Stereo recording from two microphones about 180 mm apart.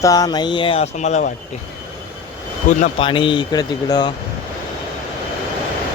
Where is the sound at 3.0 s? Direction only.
30° left (ahead or behind).